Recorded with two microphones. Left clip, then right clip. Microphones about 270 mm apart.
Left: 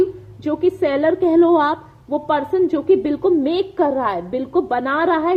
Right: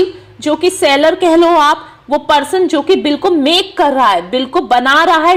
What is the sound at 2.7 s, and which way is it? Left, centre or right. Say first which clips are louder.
Speech: right 6 dB; centre.